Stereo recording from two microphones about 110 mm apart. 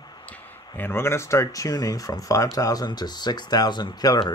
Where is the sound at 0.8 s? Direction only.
20° left (ahead or behind); by 4.2 s 40° left (ahead or behind).